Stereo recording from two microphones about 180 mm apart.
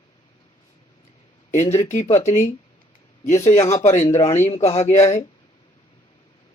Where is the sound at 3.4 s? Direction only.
40° left (ahead or behind).